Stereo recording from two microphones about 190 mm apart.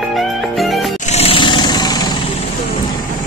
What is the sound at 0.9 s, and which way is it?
Music, 35° left (ahead or behind).